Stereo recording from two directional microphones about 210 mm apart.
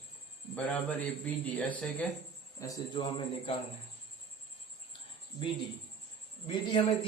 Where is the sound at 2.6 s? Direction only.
15° left (ahead or behind).